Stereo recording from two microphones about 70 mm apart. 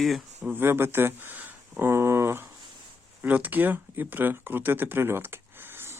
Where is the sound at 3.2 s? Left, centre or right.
Right.